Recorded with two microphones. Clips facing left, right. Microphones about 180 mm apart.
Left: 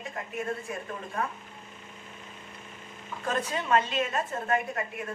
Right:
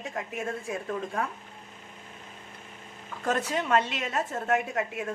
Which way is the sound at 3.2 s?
75° right (ahead or behind).